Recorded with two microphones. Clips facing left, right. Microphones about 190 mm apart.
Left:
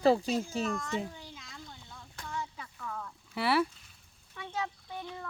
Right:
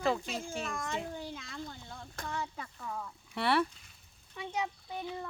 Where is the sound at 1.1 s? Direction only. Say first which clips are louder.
Right 7 dB; 60° right (ahead or behind).